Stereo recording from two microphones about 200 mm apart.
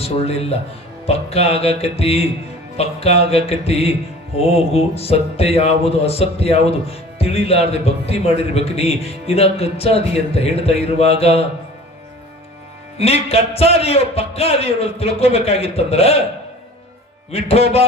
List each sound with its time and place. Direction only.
0.0 s speech: 30° left (ahead or behind)
13.0 s speech: 30° left (ahead or behind)
17.3 s speech: 30° left (ahead or behind)